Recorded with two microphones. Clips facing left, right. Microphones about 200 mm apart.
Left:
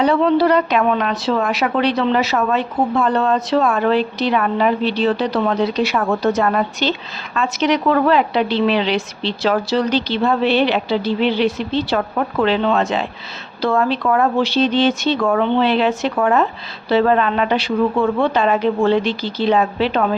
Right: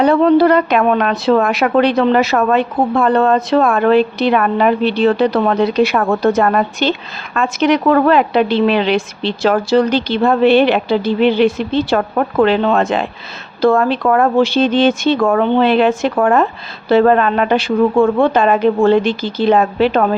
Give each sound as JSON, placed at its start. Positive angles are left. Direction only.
{"t": 0.0, "sound": "a woman's voice", "side_deg": -50}